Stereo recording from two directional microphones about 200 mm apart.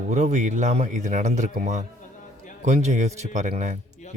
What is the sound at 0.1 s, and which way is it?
A man's voice, 35° right (ahead or behind).